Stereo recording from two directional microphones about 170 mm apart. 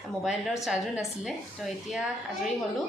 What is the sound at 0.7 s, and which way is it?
A woman's voice, centre (ahead or behind).